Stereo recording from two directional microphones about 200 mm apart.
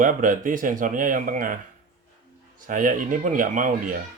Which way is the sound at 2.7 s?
40° right (ahead or behind).